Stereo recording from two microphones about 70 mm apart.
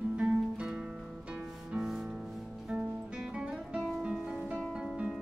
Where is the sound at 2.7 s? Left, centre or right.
Centre.